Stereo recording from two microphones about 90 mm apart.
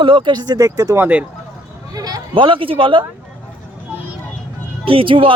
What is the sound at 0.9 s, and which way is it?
Speech, 20° right (ahead or behind).